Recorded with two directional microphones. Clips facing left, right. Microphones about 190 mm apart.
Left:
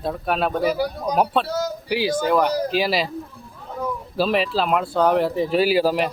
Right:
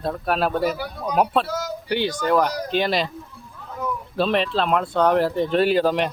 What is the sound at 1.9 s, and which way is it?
Speech, 5° left (ahead or behind).